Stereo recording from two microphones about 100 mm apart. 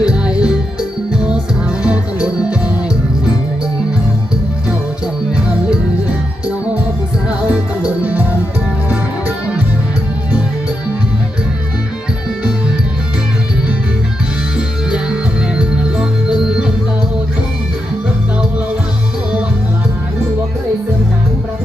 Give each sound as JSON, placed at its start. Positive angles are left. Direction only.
{"t": 0.0, "sound": "music", "side_deg": -10}
{"t": 7.3, "sound": "music", "side_deg": -10}
{"t": 15.5, "sound": "music", "side_deg": -10}